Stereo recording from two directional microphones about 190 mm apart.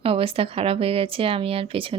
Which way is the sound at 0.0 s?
30° right (ahead or behind).